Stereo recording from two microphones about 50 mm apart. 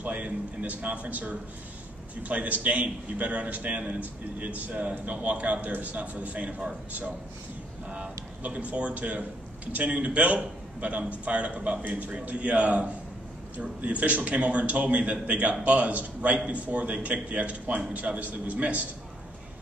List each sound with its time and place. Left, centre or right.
0.0 s a man's voice: right
7.9 s a man's voice: right